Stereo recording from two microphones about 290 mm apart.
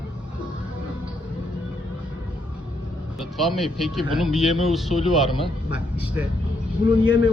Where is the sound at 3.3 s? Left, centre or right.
Centre.